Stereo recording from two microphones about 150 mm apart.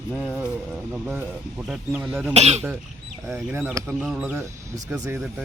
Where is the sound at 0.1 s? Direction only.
5° right (ahead or behind).